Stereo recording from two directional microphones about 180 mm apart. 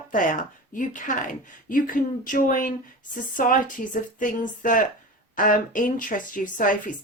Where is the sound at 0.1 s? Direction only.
50° left (ahead or behind).